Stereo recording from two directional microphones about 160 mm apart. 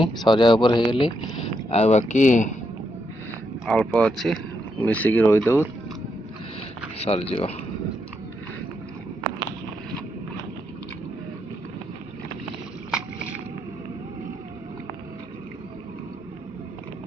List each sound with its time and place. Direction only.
0.3 s speech: 30° left (ahead or behind); by 2.6 s 50° left (ahead or behind)
3.7 s speech: 5° left (ahead or behind)
7.0 s speech: 40° left (ahead or behind)